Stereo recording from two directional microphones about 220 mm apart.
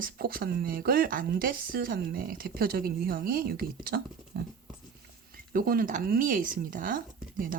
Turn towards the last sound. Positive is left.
turn(degrees=-40)  # may be behind; listen again after turning